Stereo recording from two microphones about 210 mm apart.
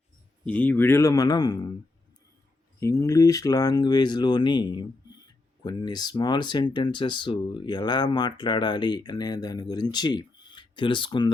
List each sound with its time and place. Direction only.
0.4 s a man's voice: 10° left (ahead or behind)
2.8 s speech: 15° left (ahead or behind)